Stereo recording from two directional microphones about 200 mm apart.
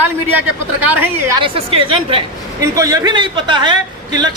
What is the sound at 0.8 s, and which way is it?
Speech, 10° right (ahead or behind).